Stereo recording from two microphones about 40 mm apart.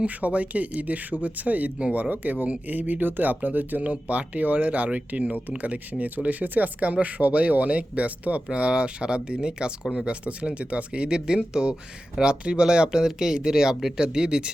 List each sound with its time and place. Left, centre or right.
0.0 s speech: right
8.4 s speech: right
10.1 s speech: right